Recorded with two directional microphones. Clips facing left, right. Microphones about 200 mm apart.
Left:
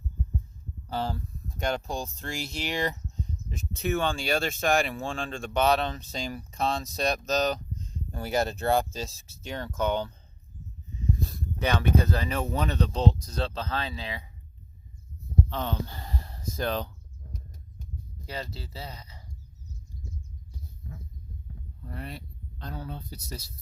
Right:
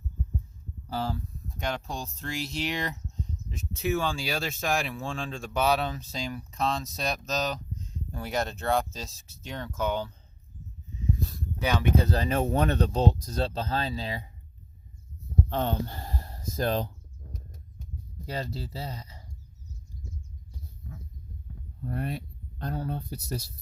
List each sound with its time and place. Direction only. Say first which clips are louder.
0.9 s speech: even; 5° right (ahead or behind)
11.6 s speech: even; 10° right (ahead or behind)
12.0 s speech: right 3 dB; 40° right (ahead or behind)
15.4 s speech: right 3 dB; 50° right (ahead or behind)
18.3 s speech: right 3 dB; 40° right (ahead or behind)
21.8 s speech: right 7 dB; 50° right (ahead or behind)